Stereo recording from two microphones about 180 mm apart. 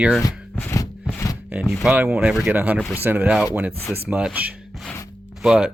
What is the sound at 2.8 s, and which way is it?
Speech, 15° left (ahead or behind).